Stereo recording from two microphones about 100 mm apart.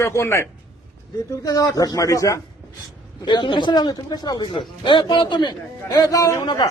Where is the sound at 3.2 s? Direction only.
50° left (ahead or behind); by 6.5 s 30° left (ahead or behind).